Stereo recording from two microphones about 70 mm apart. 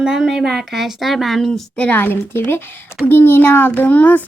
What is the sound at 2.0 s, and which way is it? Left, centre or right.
A child's voice, left.